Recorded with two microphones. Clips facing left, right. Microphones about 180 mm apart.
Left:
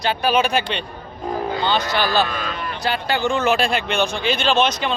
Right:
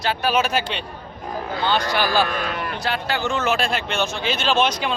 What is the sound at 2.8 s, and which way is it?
A man's voice, centre (ahead or behind).